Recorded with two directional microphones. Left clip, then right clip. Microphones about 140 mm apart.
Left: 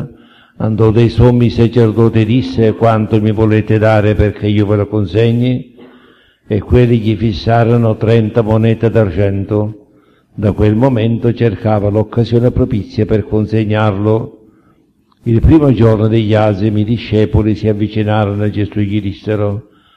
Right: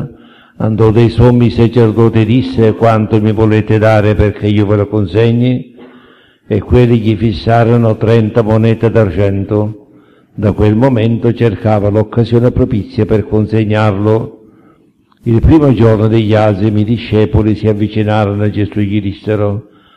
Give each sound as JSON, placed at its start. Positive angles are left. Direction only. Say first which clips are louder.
{"t": 0.6, "sound": "a man's voice", "louder": "right 2 dB", "side_deg": 40}